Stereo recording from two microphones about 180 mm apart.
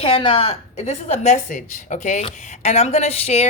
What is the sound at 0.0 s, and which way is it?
A woman's voice, 30° left (ahead or behind).